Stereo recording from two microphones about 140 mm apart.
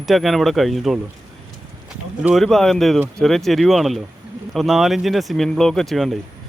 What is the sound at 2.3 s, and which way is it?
Speech, centre (ahead or behind).